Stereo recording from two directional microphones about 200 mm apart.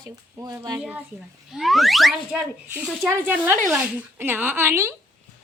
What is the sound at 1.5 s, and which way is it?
A woman's voice, centre (ahead or behind).